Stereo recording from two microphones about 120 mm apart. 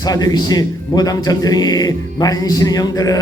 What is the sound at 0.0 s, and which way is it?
Speech, 30° left (ahead or behind).